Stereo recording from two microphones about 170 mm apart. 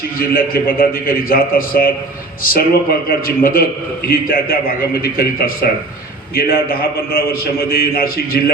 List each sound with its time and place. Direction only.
0.2 s a man's voice: 60° left (ahead or behind)